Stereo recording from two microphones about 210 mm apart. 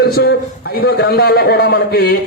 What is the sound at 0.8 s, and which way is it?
Speech, 50° left (ahead or behind).